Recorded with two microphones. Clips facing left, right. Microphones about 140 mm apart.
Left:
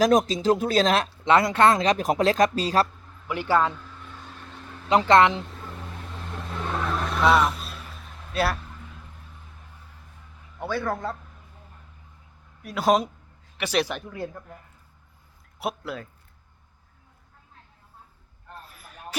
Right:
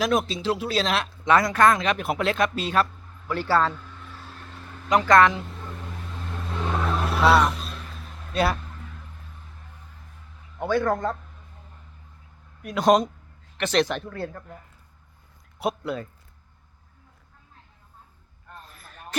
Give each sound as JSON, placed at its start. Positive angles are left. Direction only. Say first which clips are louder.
{"t": 0.0, "sound": "speech", "louder": "left 4 dB", "side_deg": 40}
{"t": 1.2, "sound": "speech", "louder": "even", "side_deg": 25}
{"t": 3.2, "sound": "speech", "louder": "even", "side_deg": 15}
{"t": 4.9, "sound": "speech", "louder": "even", "side_deg": 25}
{"t": 6.7, "sound": "vehicle", "louder": "right 2 dB", "side_deg": -5}
{"t": 10.6, "sound": "a man's voice", "louder": "right 5 dB", "side_deg": 0}
{"t": 12.6, "sound": "a man's voice", "louder": "right 2 dB", "side_deg": 5}
{"t": 15.5, "sound": "speech", "louder": "right 4 dB", "side_deg": 0}
{"t": 18.7, "sound": "a sound", "louder": "even", "side_deg": 10}